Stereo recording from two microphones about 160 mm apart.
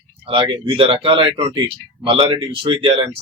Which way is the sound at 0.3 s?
30° right (ahead or behind).